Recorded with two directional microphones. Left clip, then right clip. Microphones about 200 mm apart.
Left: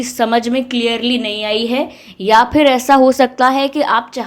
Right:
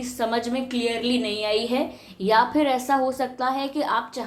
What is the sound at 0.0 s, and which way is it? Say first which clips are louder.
A woman's voice: left 10 dB; 35° left (ahead or behind).